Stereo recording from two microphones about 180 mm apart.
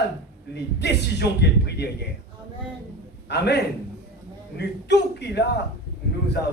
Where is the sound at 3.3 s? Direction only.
65° left (ahead or behind).